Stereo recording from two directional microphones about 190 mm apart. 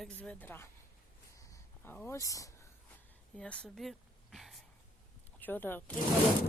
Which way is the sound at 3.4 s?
5° left (ahead or behind).